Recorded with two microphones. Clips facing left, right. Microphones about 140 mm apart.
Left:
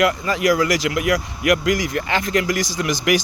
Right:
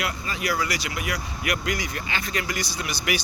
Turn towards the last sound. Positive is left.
turn(degrees=90)